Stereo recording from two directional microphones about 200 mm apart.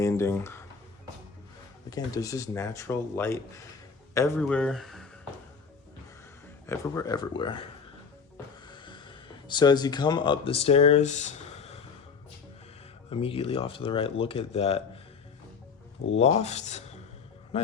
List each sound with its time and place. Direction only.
0.0 s speech: 15° left (ahead or behind)
1.9 s speech: 15° left (ahead or behind)
4.4 s speech: 5° left (ahead or behind)
6.7 s speech: 15° left (ahead or behind)
8.6 s a sound: 25° left (ahead or behind)
13.1 s speech: 30° left (ahead or behind)
16.1 s a man's voice: 35° left (ahead or behind)